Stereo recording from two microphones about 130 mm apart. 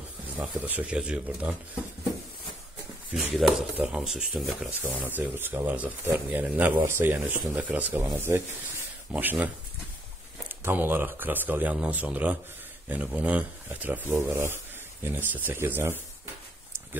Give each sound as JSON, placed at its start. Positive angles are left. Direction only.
{"t": 0.4, "sound": "speech", "side_deg": -15}
{"t": 3.1, "sound": "speech", "side_deg": -5}
{"t": 10.6, "sound": "speech", "side_deg": -15}